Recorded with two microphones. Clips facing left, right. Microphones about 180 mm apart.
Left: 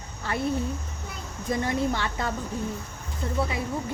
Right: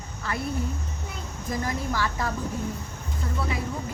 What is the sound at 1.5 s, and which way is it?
Speech, 25° left (ahead or behind).